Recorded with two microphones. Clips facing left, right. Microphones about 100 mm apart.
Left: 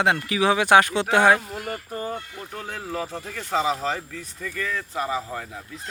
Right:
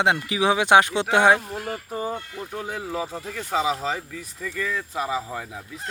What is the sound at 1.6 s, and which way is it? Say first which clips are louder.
Speech: right 2 dB; 5° right (ahead or behind).